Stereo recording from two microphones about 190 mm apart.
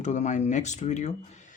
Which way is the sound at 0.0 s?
40° left (ahead or behind).